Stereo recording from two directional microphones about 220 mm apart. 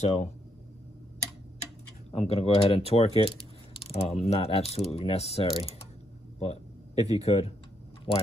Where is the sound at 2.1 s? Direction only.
25° left (ahead or behind).